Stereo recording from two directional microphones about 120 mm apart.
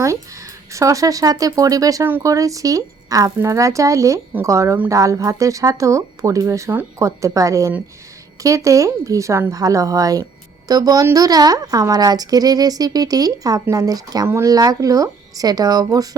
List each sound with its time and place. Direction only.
0.7 s a woman's voice: 25° right (ahead or behind)